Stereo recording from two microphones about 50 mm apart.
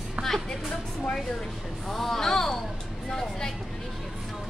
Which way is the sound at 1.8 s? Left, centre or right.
Centre.